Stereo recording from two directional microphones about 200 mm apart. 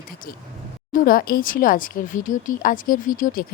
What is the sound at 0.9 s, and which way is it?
Speech, 45° left (ahead or behind).